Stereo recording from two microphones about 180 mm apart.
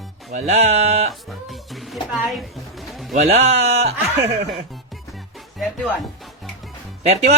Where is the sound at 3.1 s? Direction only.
40° right (ahead or behind).